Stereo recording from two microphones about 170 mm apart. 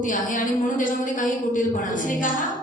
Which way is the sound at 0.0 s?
50° left (ahead or behind).